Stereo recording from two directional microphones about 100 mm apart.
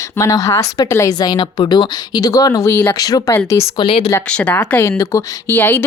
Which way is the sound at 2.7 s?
20° left (ahead or behind).